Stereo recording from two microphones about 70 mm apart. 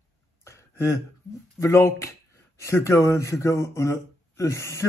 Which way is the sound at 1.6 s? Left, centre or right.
Left.